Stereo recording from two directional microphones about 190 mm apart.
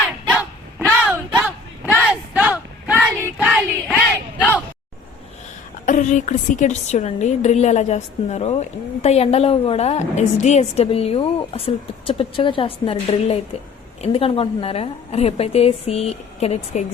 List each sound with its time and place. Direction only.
0.3 s dog: 5° right (ahead or behind)
2.3 s a sound: 5° right (ahead or behind)
5.8 s a woman's voice: 40° left (ahead or behind)